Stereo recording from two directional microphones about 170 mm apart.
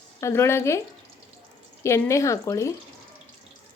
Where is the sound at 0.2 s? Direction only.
15° left (ahead or behind).